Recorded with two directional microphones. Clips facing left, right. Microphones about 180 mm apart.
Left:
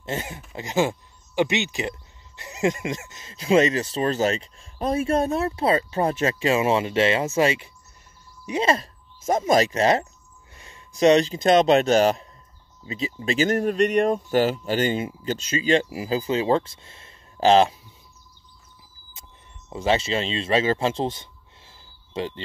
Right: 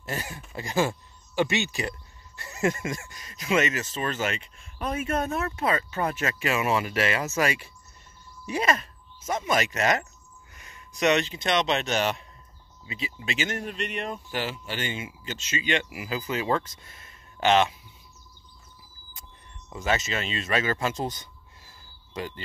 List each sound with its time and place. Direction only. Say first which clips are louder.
0.0 s speech: left 4 dB; 25° left (ahead or behind)
9.2 s speech: left 7 dB; 40° left (ahead or behind)
19.7 s speech: left 5 dB; 30° left (ahead or behind)